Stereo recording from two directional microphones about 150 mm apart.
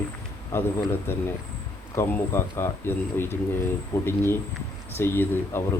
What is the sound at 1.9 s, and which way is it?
Speech, 15° left (ahead or behind).